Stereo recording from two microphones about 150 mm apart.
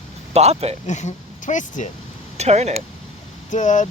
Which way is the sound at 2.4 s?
45° right (ahead or behind).